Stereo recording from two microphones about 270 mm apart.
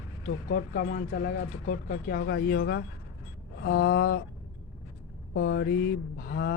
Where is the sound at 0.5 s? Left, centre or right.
Left.